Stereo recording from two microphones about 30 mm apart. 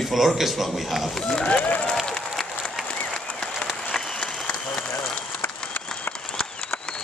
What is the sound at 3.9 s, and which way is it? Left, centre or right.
Applause, centre.